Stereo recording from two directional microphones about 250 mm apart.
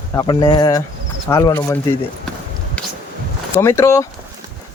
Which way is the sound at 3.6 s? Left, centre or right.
Centre.